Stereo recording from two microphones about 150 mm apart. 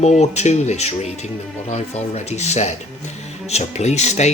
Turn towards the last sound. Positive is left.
turn(degrees=50)  # may be behind; listen again after turning